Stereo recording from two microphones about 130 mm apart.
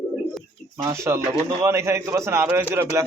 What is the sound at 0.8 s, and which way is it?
A man's voice, 20° right (ahead or behind).